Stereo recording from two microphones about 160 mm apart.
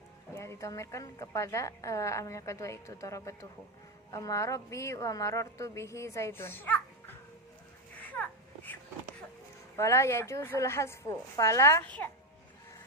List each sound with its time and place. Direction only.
0.3 s a woman's voice: 20° left (ahead or behind)
8.1 s a sound: 10° left (ahead or behind)
9.7 s a woman's voice: 15° left (ahead or behind)